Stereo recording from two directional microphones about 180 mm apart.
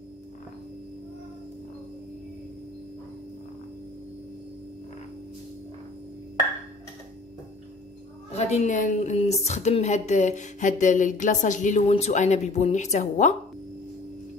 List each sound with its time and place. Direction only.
8.3 s a woman's voice: 35° left (ahead or behind)